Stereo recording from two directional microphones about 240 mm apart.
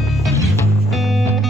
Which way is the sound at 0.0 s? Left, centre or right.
Centre.